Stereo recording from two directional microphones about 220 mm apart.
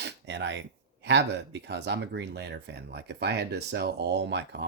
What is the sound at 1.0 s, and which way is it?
Speech, 55° right (ahead or behind).